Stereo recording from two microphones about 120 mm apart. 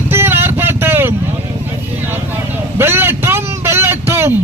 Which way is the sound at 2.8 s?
20° right (ahead or behind).